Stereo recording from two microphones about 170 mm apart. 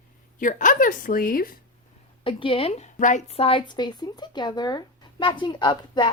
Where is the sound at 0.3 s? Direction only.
50° left (ahead or behind).